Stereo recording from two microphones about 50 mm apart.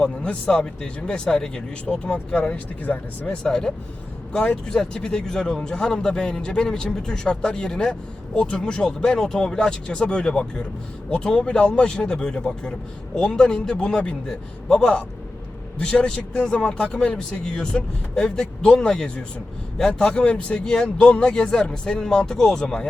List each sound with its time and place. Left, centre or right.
0.0 s speech: left